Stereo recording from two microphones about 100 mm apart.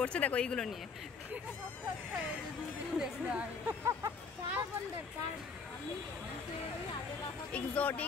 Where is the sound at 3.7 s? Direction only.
30° right (ahead or behind).